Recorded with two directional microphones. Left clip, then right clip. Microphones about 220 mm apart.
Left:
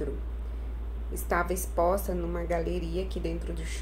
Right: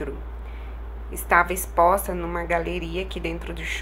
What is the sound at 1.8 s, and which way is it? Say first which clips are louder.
Speech: right 8 dB; 20° right (ahead or behind).